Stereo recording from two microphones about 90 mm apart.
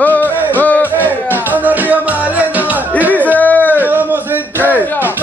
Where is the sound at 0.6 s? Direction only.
20° left (ahead or behind).